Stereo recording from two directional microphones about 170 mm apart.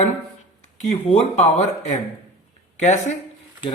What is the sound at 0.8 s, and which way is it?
Speech, 40° left (ahead or behind).